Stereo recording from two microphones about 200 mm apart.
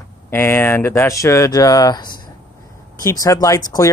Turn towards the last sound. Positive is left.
turn(degrees=15)  # may be behind; listen again after turning